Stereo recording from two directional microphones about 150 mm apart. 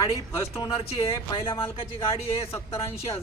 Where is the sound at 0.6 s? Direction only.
40° left (ahead or behind).